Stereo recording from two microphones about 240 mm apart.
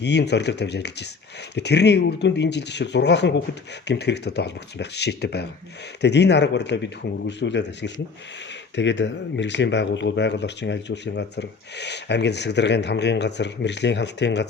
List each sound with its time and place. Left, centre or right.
0.0 s speech: left